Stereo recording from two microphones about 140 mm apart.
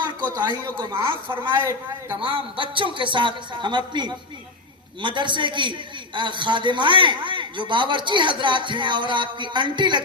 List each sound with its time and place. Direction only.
0.3 s a man's voice: 35° right (ahead or behind)